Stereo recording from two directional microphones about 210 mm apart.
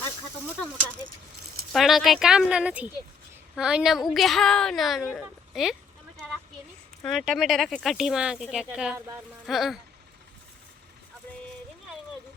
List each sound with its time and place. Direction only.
1.7 s speech: centre (ahead or behind)
7.0 s speech: centre (ahead or behind)